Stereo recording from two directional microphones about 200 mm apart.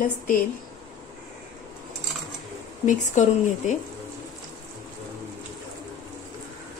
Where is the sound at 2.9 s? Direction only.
35° left (ahead or behind).